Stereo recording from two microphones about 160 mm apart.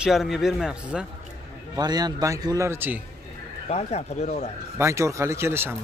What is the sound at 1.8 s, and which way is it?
Speech, 25° right (ahead or behind).